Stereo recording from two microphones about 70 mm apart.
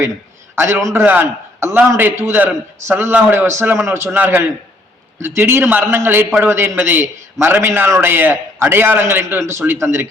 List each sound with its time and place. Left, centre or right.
0.5 s a man's voice: right
0.9 s a man's voice: right
1.5 s a man's voice: right
4.1 s a man's voice: right